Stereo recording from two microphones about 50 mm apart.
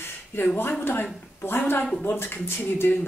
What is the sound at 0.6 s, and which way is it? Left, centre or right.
Speech, left.